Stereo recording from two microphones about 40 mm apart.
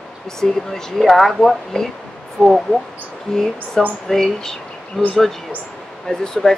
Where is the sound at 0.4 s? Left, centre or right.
Centre.